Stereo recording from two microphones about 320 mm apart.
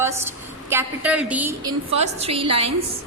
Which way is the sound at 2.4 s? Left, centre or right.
Right.